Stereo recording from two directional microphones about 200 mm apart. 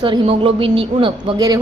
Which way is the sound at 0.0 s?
25° right (ahead or behind).